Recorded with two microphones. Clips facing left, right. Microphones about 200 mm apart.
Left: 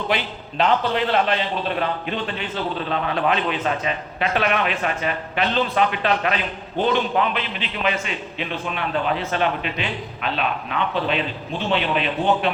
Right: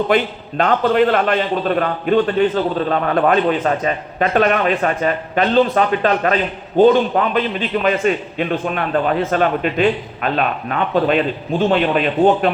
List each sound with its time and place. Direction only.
0.1 s a man's voice: 50° right (ahead or behind)